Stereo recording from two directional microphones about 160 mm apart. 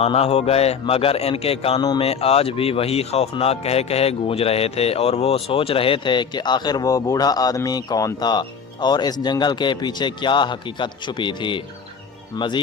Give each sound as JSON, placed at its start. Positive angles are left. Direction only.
{"t": 0.0, "sound": "a man's voice", "side_deg": 40}